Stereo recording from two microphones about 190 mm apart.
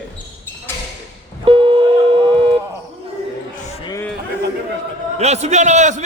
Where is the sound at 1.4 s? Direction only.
30° right (ahead or behind).